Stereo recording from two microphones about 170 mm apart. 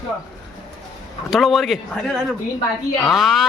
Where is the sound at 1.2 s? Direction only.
Centre (ahead or behind).